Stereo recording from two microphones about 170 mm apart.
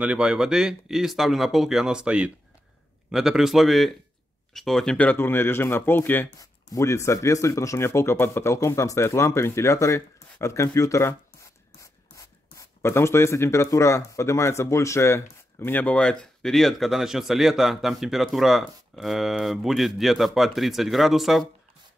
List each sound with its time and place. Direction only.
0.0 s speech: 5° right (ahead or behind)